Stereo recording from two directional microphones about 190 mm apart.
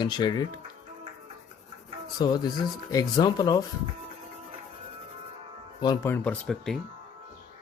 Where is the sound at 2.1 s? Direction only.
20° left (ahead or behind).